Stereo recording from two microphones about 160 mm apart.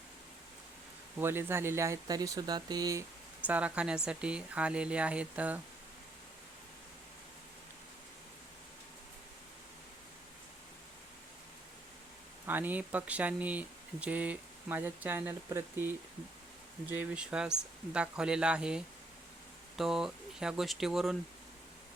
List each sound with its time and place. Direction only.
1.2 s speech: 15° right (ahead or behind)
3.4 s speech: 10° right (ahead or behind)
12.5 s speech: 10° right (ahead or behind)